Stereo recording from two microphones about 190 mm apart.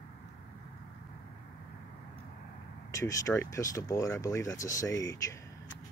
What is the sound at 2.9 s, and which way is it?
Speech, 15° left (ahead or behind).